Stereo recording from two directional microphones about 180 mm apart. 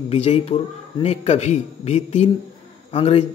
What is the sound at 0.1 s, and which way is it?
A man's voice, 35° left (ahead or behind).